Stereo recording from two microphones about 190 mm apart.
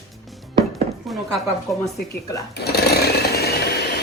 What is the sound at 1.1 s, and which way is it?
Speech, centre (ahead or behind).